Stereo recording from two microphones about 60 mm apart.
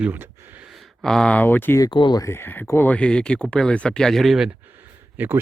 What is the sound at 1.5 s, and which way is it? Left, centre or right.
Speech, left.